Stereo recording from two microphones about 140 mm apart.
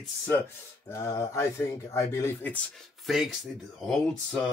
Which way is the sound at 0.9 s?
20° left (ahead or behind).